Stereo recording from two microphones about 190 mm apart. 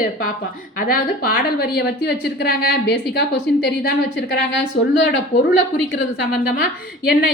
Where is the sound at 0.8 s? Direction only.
50° left (ahead or behind); by 5.6 s 75° left (ahead or behind).